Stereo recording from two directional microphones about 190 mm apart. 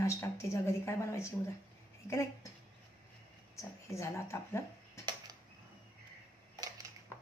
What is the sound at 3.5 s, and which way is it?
Speech, 15° left (ahead or behind).